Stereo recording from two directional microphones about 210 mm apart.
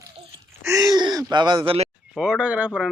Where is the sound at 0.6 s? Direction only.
15° right (ahead or behind).